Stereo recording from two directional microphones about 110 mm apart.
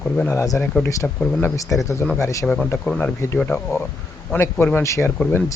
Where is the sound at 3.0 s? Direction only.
25° left (ahead or behind).